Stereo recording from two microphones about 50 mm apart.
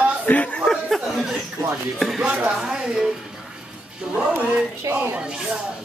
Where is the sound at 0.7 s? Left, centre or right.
Centre.